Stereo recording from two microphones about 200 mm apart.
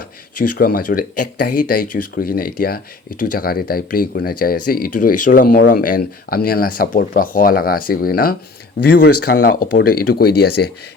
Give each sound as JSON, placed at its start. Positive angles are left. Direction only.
{"t": 0.3, "sound": "speech", "side_deg": 45}